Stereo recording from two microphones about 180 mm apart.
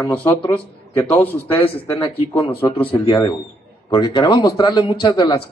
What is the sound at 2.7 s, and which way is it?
A man's voice, 30° left (ahead or behind).